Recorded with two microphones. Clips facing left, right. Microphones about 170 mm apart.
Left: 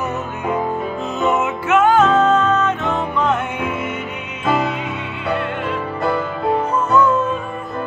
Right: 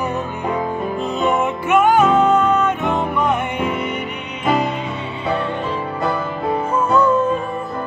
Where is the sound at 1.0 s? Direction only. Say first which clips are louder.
Right 1 dB; 15° right (ahead or behind).